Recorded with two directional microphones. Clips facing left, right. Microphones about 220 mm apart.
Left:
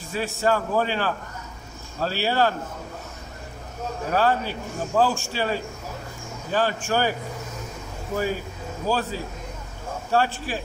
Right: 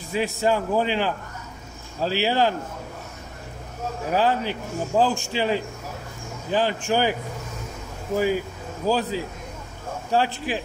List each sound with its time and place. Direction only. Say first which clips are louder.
0.1 s a man's voice: right 1 dB; 15° right (ahead or behind)
4.1 s a man's voice: even; 15° right (ahead or behind)
8.8 s a man's voice: right 3 dB; 15° right (ahead or behind)